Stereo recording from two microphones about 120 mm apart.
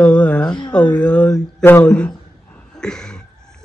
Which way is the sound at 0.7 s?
10° left (ahead or behind).